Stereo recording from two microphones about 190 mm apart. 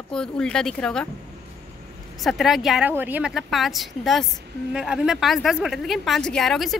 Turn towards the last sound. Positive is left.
turn(degrees=0)  # may be behind; listen again after turning